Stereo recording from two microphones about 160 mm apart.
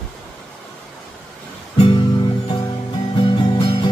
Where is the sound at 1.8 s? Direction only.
30° left (ahead or behind).